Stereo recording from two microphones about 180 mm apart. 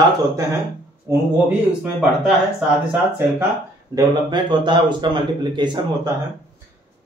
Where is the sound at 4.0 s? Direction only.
25° right (ahead or behind).